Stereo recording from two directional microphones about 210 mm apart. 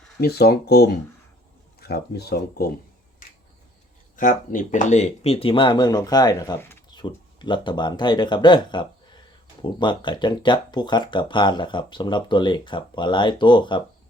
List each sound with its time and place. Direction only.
0.2 s speech: 50° left (ahead or behind)
4.2 s speech: 40° left (ahead or behind); by 6.8 s 10° left (ahead or behind)
6.9 s speech: 20° left (ahead or behind)